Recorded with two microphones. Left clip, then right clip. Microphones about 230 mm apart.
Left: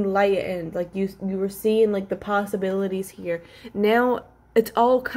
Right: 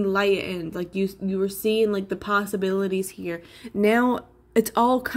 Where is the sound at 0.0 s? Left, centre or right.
Right.